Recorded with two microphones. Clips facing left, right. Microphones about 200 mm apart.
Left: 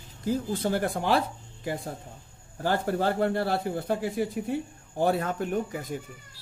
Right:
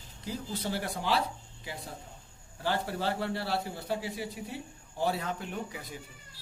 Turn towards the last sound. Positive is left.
turn(degrees=50)  # may be behind; listen again after turning